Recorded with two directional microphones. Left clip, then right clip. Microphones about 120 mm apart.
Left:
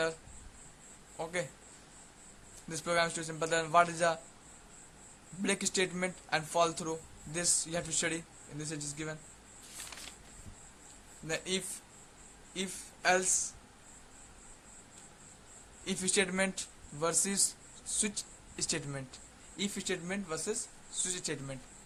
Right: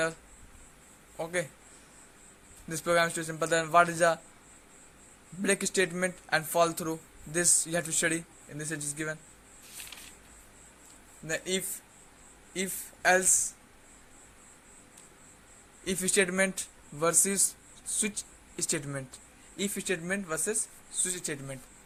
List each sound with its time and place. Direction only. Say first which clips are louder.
1.1 s speech: right 4 dB; 30° right (ahead or behind)
2.6 s a man's voice: right 5 dB; 30° right (ahead or behind)
5.4 s speech: right 5 dB; 30° right (ahead or behind)
11.3 s speech: right 3 dB; 30° right (ahead or behind)
15.8 s speech: right 4 dB; 30° right (ahead or behind)